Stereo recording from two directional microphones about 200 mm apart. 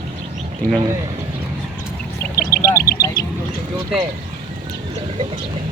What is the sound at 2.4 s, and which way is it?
Duck, 15° left (ahead or behind).